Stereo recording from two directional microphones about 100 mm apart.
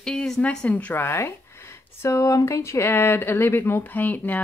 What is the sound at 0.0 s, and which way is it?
A woman's voice, 10° left (ahead or behind).